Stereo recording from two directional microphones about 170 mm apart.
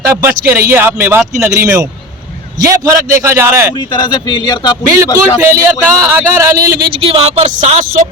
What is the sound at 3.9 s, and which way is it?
Speech, 25° left (ahead or behind).